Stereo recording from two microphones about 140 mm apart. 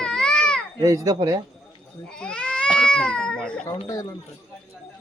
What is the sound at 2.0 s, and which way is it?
Speech, 5° left (ahead or behind).